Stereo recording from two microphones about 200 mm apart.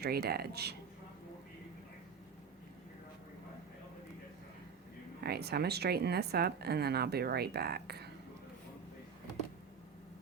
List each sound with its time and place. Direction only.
0.0 s speech: 50° right (ahead or behind)
5.2 s speech: 55° right (ahead or behind)